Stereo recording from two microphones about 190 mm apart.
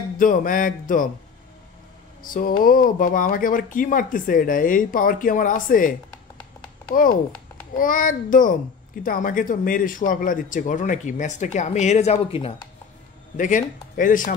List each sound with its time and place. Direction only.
0.2 s speech: 45° left (ahead or behind)
2.2 s speech: 45° left (ahead or behind); by 12.5 s 30° left (ahead or behind)
13.4 s speech: 40° left (ahead or behind)